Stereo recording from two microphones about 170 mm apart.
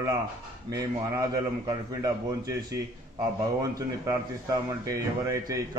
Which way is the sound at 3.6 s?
20° right (ahead or behind).